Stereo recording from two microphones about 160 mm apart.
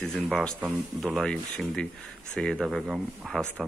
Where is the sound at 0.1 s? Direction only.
5° left (ahead or behind).